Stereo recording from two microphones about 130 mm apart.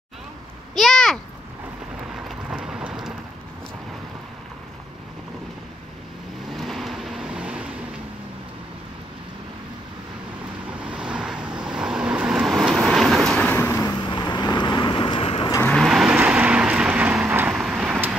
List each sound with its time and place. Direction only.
0.7 s a sound: centre (ahead or behind)
2.2 s rain: 5° right (ahead or behind)
6.5 s vehicle: centre (ahead or behind)
10.8 s vehicle: 10° right (ahead or behind); by 13.8 s 15° left (ahead or behind)
13.8 s vehicle: 35° left (ahead or behind)
15.6 s vehicle: centre (ahead or behind)